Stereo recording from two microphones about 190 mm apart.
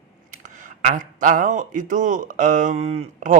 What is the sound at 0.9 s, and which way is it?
A man's voice, 45° right (ahead or behind).